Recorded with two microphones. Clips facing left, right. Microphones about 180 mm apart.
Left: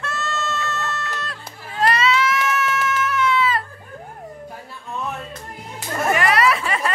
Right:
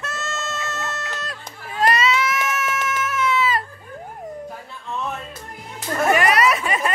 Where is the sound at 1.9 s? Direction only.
20° right (ahead or behind).